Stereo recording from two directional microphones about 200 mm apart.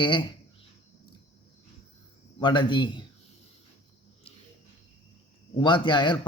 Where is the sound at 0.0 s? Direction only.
25° left (ahead or behind).